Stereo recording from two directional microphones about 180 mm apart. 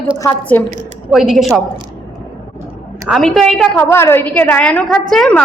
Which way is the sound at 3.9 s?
15° left (ahead or behind).